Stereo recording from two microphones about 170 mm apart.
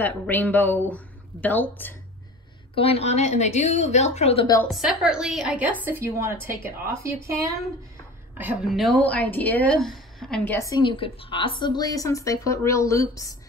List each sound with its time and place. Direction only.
0.0 s a woman's voice: 10° left (ahead or behind)
2.7 s a woman's voice: 35° left (ahead or behind)
4.6 s a woman's voice: centre (ahead or behind); by 7.2 s 15° right (ahead or behind)
8.6 s a woman's voice: centre (ahead or behind); by 13.4 s 20° left (ahead or behind)